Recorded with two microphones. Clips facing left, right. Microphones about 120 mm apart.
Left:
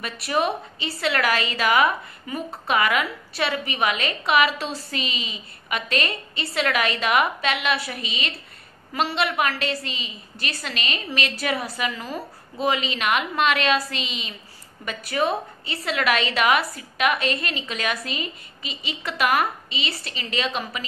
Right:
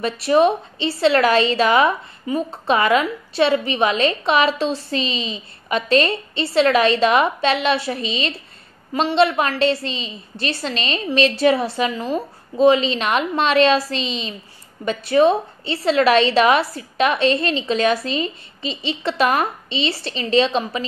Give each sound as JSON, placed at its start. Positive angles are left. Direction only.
{"t": 0.0, "sound": "a woman's voice", "side_deg": -25}